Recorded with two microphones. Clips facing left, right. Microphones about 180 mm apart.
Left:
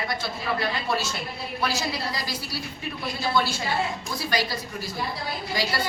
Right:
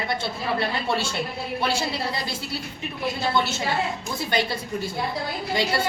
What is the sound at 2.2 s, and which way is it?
A woman's voice, 25° right (ahead or behind).